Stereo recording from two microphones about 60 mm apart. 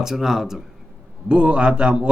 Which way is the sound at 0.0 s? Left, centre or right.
Centre.